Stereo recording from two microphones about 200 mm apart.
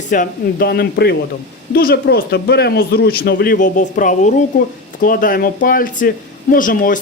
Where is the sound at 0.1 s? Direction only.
45° left (ahead or behind).